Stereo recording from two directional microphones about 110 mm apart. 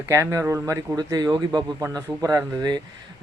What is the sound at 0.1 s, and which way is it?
Speech, 25° right (ahead or behind).